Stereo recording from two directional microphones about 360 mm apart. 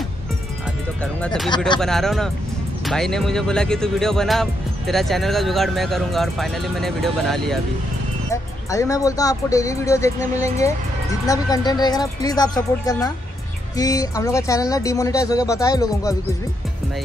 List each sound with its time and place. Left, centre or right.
1.2 s speech: centre